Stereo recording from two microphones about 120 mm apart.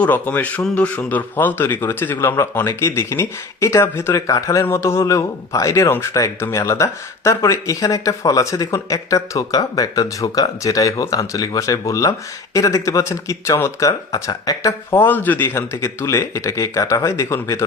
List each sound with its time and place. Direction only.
0.0 s speech: 15° left (ahead or behind)